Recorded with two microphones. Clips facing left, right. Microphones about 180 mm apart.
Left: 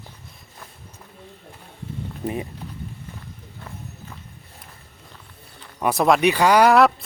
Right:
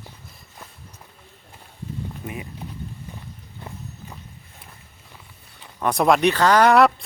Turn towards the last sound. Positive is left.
turn(degrees=10)  # may be behind; listen again after turning